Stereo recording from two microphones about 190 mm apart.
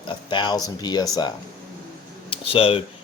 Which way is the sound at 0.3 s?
25° left (ahead or behind).